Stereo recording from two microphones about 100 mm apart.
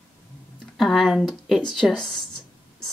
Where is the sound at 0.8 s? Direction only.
Centre (ahead or behind).